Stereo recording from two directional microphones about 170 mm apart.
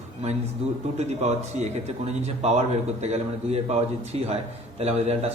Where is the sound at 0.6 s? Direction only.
35° right (ahead or behind).